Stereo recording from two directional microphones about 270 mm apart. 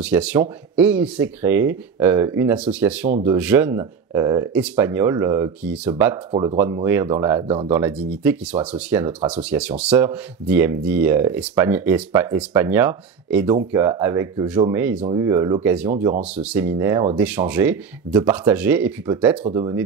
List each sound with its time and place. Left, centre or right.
0.0 s speech: centre
7.4 s speech: right
7.7 s speech: centre